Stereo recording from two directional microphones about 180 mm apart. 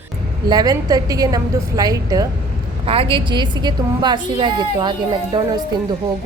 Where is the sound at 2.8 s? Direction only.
30° right (ahead or behind).